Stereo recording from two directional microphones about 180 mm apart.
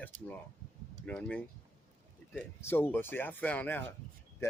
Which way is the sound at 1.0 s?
5° left (ahead or behind).